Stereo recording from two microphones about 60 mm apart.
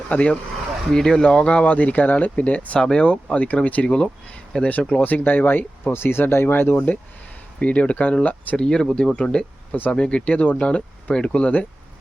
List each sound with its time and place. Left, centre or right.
0.1 s speech: left
0.9 s speech: centre
5.0 s speech: left
8.5 s speech: centre